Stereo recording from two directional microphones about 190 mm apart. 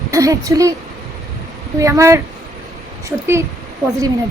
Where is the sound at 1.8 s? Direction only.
15° right (ahead or behind).